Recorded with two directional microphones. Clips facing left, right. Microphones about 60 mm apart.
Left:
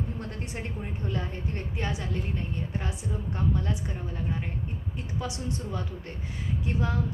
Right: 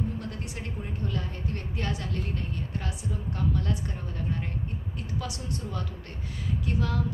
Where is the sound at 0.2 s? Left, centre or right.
Left.